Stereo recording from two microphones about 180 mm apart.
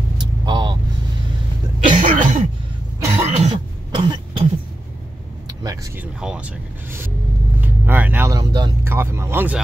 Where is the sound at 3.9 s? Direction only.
25° right (ahead or behind).